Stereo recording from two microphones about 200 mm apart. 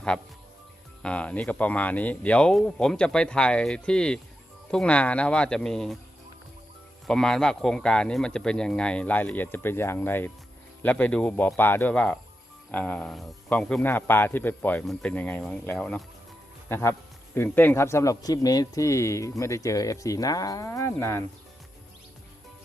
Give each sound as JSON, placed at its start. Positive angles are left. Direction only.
{"t": 1.0, "sound": "speech", "side_deg": 5}
{"t": 7.1, "sound": "speech", "side_deg": 5}